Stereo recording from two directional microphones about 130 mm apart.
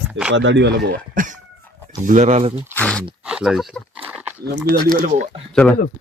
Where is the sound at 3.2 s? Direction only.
5° right (ahead or behind).